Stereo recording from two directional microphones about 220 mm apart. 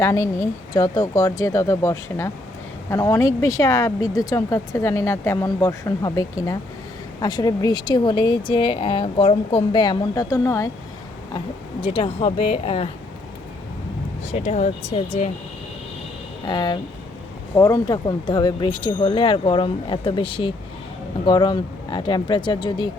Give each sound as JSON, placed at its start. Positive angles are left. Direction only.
{"t": 0.0, "sound": "speech", "side_deg": 15}
{"t": 11.3, "sound": "speech", "side_deg": 25}
{"t": 14.3, "sound": "speech", "side_deg": 30}
{"t": 16.5, "sound": "speech", "side_deg": 20}